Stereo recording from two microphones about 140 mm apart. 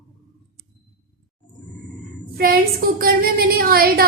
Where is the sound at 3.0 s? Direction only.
90° right.